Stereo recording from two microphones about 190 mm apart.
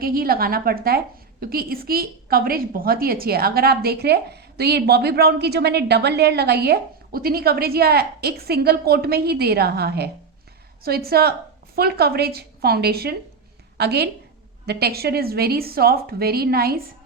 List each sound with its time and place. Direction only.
0.0 s a woman's voice: 50° right (ahead or behind)